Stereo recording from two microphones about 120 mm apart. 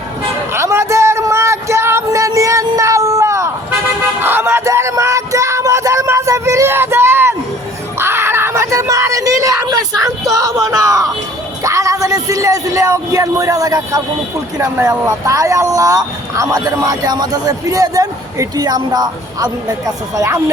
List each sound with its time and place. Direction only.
0.5 s a sound: 20° right (ahead or behind)
7.9 s screaming: 20° right (ahead or behind)
11.6 s a man's voice: 25° right (ahead or behind)